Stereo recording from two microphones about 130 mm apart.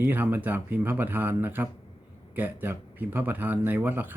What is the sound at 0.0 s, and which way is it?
Speech, 15° right (ahead or behind).